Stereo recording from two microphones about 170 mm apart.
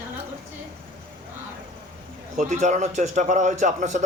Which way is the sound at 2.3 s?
45° right (ahead or behind).